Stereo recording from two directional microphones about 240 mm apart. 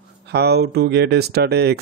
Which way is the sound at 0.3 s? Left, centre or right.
Right.